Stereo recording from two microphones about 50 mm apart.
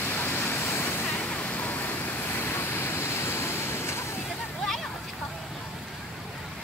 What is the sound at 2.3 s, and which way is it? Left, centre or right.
Vehicle, left.